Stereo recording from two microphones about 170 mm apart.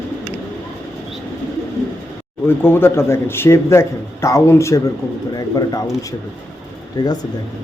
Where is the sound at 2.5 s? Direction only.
15° left (ahead or behind).